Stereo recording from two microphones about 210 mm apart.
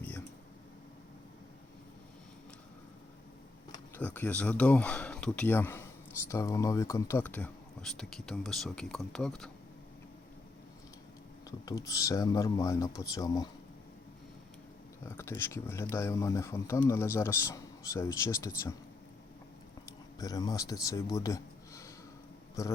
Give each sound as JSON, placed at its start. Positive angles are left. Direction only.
{"t": 3.9, "sound": "speech", "side_deg": 10}
{"t": 11.6, "sound": "speech", "side_deg": 15}
{"t": 15.0, "sound": "speech", "side_deg": 10}
{"t": 20.1, "sound": "speech", "side_deg": 15}